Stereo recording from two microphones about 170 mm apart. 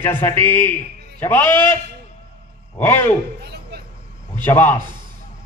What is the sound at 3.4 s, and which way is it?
Chop, 75° right (ahead or behind).